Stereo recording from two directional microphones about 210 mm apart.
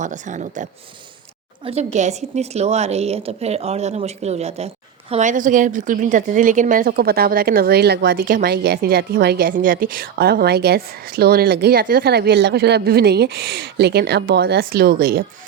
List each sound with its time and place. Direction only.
0.0 s a woman's voice: 35° right (ahead or behind)